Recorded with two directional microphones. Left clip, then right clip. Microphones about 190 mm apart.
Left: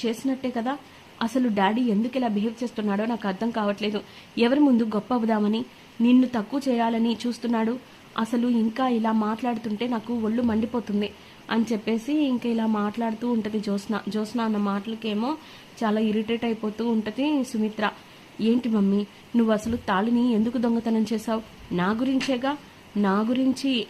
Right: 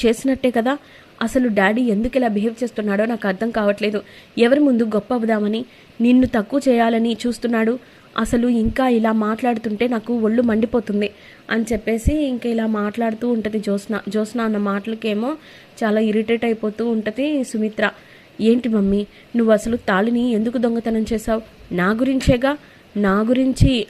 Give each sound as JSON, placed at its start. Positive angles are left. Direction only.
{"t": 0.0, "sound": "a woman's voice", "side_deg": -25}
{"t": 11.7, "sound": "a woman's voice", "side_deg": -5}